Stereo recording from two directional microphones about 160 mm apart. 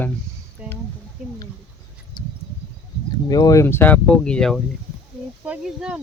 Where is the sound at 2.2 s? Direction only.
30° left (ahead or behind).